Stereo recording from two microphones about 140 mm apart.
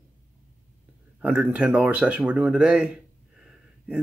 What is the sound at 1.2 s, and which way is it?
Speech, 10° right (ahead or behind).